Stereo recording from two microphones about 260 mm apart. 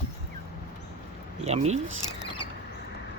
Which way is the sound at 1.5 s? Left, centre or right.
Right.